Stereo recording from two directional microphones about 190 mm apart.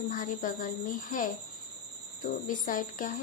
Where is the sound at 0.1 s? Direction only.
45° left (ahead or behind).